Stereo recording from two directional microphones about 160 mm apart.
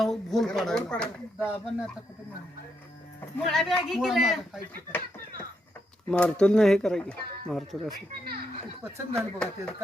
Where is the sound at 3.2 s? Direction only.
10° left (ahead or behind).